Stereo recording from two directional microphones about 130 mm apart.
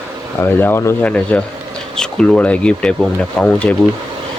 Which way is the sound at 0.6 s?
20° left (ahead or behind).